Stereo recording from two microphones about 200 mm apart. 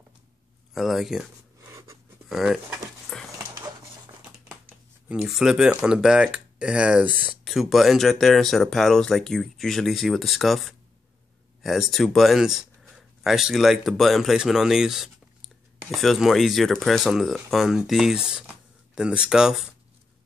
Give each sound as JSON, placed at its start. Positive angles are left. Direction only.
{"t": 0.7, "sound": "speech", "side_deg": 0}
{"t": 2.2, "sound": "speech", "side_deg": 0}
{"t": 3.1, "sound": "dog", "side_deg": 5}
{"t": 5.0, "sound": "speech", "side_deg": -5}